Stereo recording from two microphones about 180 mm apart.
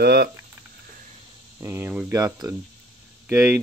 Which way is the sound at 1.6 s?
10° right (ahead or behind).